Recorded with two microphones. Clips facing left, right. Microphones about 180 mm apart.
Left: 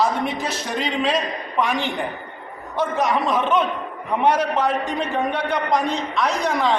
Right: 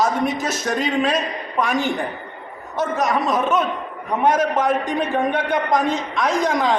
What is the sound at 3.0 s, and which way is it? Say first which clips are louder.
A woman's voice: right 1 dB; 40° right (ahead or behind).